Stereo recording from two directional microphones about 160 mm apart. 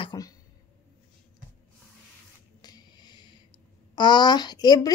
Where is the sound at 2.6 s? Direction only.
25° left (ahead or behind).